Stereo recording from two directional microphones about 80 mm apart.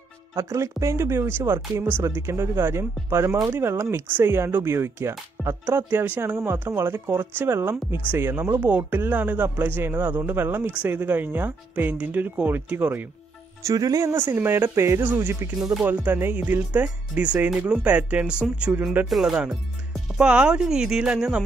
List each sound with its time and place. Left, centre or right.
0.4 s speech: right
13.6 s speech: right
14.1 s speech: right
19.0 s speech: centre